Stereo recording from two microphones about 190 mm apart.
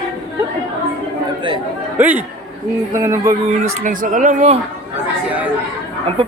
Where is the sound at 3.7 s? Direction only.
45° right (ahead or behind).